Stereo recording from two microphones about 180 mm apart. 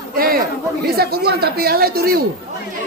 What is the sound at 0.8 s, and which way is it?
Speech, 60° right (ahead or behind).